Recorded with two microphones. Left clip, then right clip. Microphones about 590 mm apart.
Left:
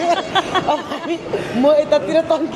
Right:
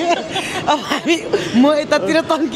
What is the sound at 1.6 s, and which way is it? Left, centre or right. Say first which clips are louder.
Speech: left 3 dB; right.